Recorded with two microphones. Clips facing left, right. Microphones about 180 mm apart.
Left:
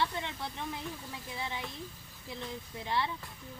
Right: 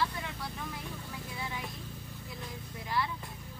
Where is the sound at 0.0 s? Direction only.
25° left (ahead or behind).